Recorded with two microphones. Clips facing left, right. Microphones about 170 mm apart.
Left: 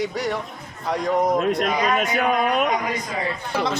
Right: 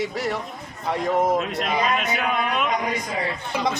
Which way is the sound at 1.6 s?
45° left (ahead or behind).